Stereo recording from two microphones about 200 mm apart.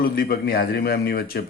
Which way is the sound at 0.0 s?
50° left (ahead or behind).